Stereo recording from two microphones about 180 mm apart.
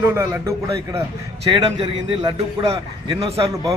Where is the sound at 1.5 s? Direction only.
30° right (ahead or behind).